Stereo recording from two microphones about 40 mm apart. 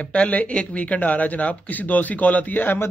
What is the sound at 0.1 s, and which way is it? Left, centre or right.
A man's voice, left.